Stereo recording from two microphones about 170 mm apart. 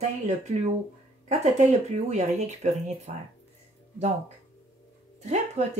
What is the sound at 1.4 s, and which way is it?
Speech, 45° right (ahead or behind).